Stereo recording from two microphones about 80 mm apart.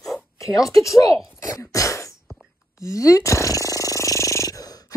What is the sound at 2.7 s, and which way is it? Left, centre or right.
Snoring, left.